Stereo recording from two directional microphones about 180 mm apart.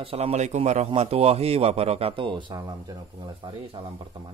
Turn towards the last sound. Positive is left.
turn(degrees=-30)  # may be behind; listen again after turning